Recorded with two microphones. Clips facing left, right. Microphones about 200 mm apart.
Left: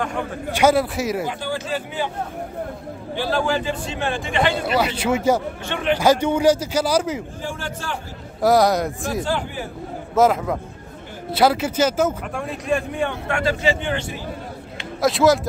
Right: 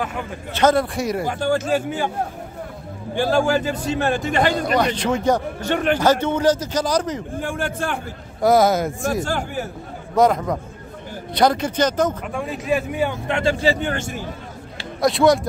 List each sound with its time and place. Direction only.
0.5 s speech: 10° left (ahead or behind)
1.2 s a man's voice: 45° right (ahead or behind)
3.2 s a man's voice: 45° right (ahead or behind)
4.7 s a man's voice: 5° left (ahead or behind)
5.6 s a man's voice: 45° right (ahead or behind)
5.9 s a man's voice: 10° left (ahead or behind)
7.3 s a man's voice: 55° right (ahead or behind)
8.4 s speech: centre (ahead or behind)
9.2 s a man's voice: 45° right (ahead or behind)
10.1 s speech: 5° left (ahead or behind)
13.3 s speech: 25° right (ahead or behind)
15.0 s speech: centre (ahead or behind)